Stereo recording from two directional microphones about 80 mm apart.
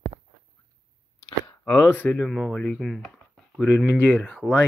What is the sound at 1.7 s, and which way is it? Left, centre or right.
Speech, centre.